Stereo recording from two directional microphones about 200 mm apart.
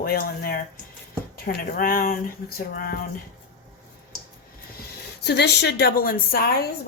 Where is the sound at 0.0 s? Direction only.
50° left (ahead or behind).